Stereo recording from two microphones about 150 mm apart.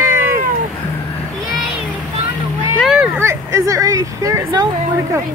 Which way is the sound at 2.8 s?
Centre (ahead or behind).